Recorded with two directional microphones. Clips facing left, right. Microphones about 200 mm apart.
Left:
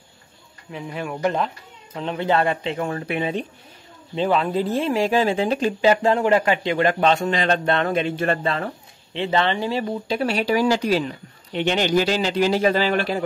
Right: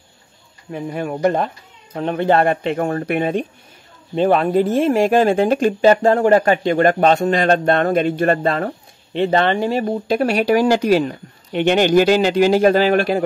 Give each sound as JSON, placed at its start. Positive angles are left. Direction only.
{"t": 0.7, "sound": "speech", "side_deg": -50}